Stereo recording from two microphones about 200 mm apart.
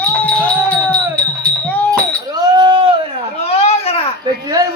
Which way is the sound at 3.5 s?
30° left (ahead or behind).